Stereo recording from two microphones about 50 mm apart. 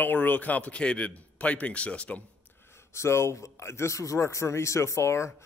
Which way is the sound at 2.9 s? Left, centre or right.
Left.